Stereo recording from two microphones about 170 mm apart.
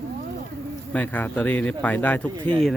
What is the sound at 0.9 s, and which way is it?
Speech, 10° left (ahead or behind).